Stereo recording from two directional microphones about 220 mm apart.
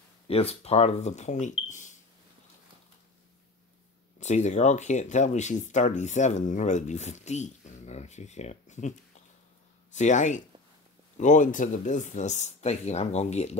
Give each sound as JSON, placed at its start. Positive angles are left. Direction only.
{"t": 0.3, "sound": "speech", "side_deg": 25}
{"t": 4.2, "sound": "speech", "side_deg": 30}
{"t": 9.9, "sound": "speech", "side_deg": 35}